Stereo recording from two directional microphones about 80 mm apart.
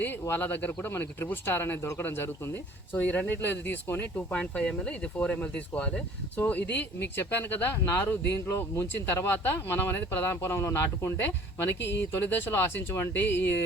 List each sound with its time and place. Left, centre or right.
0.0 s speech: left
4.4 s speech: centre; by 11.1 s left
11.2 s speech: left